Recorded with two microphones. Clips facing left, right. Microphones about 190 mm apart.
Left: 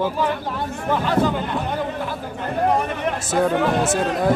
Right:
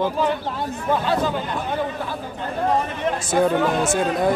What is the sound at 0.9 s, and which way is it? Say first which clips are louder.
Speech: right 1 dB; 15° right (ahead or behind).